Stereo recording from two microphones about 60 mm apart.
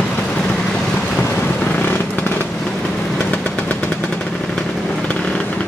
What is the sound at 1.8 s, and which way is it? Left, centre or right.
Fireworks, left.